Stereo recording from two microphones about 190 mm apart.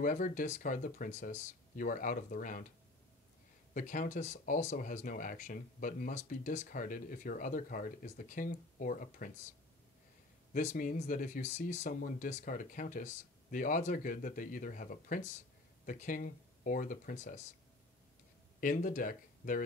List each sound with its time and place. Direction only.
0.0 s speech: 45° left (ahead or behind)
3.7 s speech: 45° left (ahead or behind)
10.5 s speech: 40° left (ahead or behind)
18.6 s speech: 45° left (ahead or behind)